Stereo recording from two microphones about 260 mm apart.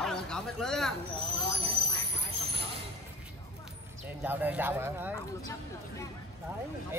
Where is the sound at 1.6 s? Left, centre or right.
Right.